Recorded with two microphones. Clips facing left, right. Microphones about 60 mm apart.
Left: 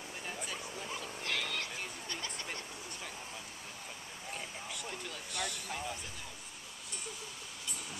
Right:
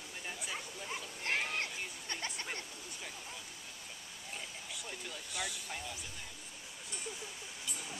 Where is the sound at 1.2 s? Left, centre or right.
Right.